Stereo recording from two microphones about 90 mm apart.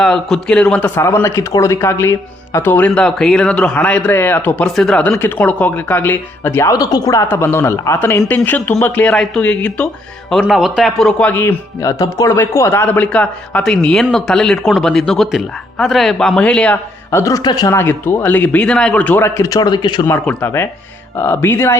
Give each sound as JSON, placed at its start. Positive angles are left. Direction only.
{"t": 0.0, "sound": "speech", "side_deg": 5}
{"t": 1.0, "sound": "speech", "side_deg": 30}
{"t": 2.9, "sound": "speech", "side_deg": 5}
{"t": 4.7, "sound": "speech", "side_deg": 5}
{"t": 6.7, "sound": "speech", "side_deg": 45}
{"t": 7.3, "sound": "speech", "side_deg": 25}
{"t": 10.5, "sound": "speech", "side_deg": -5}
{"t": 11.2, "sound": "speech", "side_deg": 20}
{"t": 11.8, "sound": "speech", "side_deg": 35}
{"t": 17.1, "sound": "a man's voice", "side_deg": 30}
{"t": 17.3, "sound": "speech", "side_deg": 45}
{"t": 17.7, "sound": "speech", "side_deg": 25}
{"t": 19.4, "sound": "speech", "side_deg": 45}
{"t": 20.4, "sound": "speech", "side_deg": 30}